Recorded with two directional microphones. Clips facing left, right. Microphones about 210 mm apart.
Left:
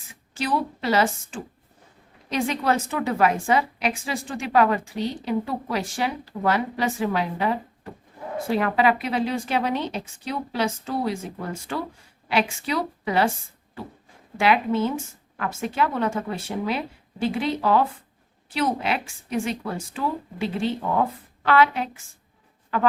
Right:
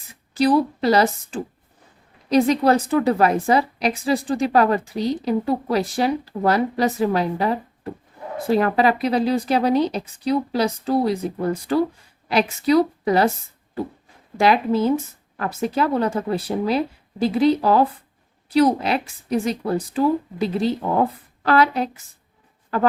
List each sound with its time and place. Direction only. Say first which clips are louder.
0.1 s a woman's voice: right 9 dB; 35° right (ahead or behind)
14.3 s a woman's voice: right 3 dB; 35° right (ahead or behind)